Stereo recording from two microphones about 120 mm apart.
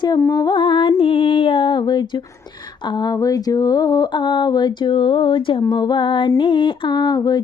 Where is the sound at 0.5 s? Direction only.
45° left (ahead or behind).